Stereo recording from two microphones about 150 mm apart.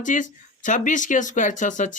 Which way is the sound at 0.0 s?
60° left (ahead or behind).